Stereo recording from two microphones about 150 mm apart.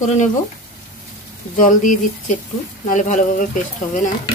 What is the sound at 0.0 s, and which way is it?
Speech, 50° left (ahead or behind).